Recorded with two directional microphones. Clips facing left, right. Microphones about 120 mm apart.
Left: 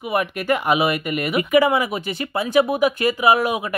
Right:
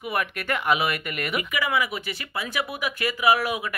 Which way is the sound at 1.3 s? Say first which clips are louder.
Left 10 dB; 35° left (ahead or behind).